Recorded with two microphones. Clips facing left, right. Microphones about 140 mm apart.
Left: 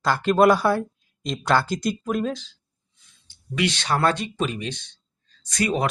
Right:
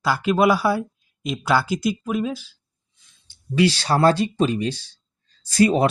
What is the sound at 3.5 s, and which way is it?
Speech, 35° right (ahead or behind).